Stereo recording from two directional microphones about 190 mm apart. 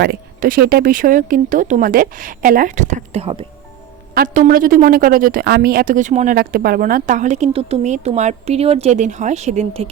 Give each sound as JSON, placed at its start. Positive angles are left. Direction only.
{"t": 0.0, "sound": "speech", "side_deg": -50}
{"t": 4.1, "sound": "a woman's voice", "side_deg": -45}